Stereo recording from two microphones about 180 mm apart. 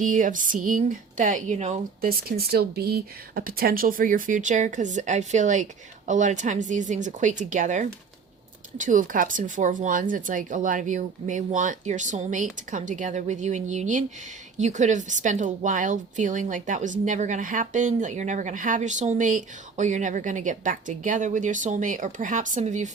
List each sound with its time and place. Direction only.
0.0 s speech: 45° right (ahead or behind)
2.0 s speech: 55° right (ahead or behind)